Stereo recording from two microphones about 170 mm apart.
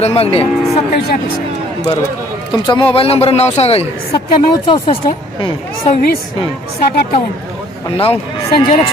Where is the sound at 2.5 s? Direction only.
25° left (ahead or behind).